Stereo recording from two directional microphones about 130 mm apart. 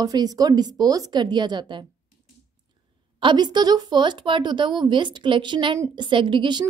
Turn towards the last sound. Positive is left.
turn(degrees=-35)  # may be behind; listen again after turning